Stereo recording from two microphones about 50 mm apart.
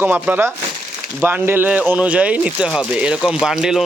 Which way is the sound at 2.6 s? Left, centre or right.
Centre.